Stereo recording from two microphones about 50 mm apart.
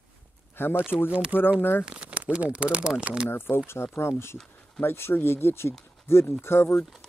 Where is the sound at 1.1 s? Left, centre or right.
Right.